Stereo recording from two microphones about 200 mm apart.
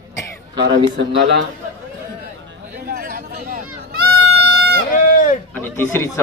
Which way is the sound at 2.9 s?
50° right (ahead or behind).